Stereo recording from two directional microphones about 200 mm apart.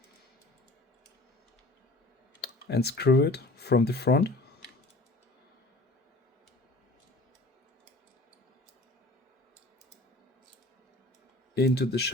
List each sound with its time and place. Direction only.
2.4 s speech: 55° left (ahead or behind)
11.5 s speech: 55° left (ahead or behind)